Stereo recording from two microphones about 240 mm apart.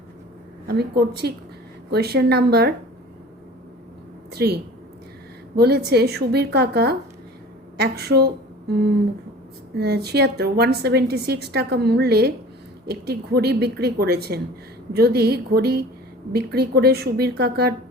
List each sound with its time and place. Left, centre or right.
0.7 s a woman's voice: right
4.3 s a woman's voice: right